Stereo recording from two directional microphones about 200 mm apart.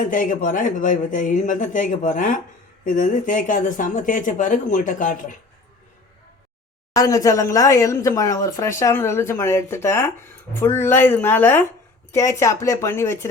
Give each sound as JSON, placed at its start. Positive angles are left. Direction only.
{"t": 0.0, "sound": "speech", "side_deg": 40}
{"t": 6.9, "sound": "speech", "side_deg": 15}